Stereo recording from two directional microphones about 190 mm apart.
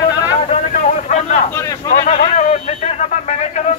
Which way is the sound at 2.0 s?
35° left (ahead or behind).